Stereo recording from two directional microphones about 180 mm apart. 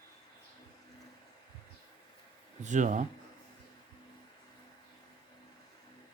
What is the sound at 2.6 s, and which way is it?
Speech, 45° right (ahead or behind).